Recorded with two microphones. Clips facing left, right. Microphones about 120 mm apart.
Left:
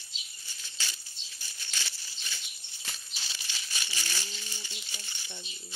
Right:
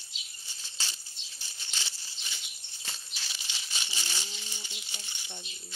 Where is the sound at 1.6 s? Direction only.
20° right (ahead or behind).